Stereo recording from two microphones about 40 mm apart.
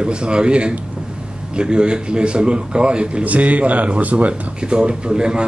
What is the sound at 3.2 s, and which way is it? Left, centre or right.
Speech, right.